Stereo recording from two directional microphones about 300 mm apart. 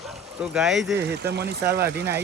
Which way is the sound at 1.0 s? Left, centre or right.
Right.